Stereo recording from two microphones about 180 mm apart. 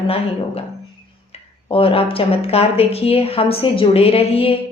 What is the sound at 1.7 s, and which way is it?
A woman's voice, 30° left (ahead or behind).